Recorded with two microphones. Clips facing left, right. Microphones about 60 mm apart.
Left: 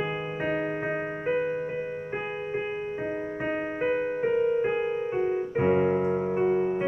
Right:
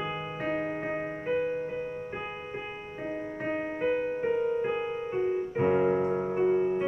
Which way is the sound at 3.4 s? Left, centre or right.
Centre.